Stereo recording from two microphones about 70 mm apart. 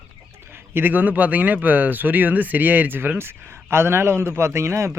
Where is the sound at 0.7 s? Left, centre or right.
Right.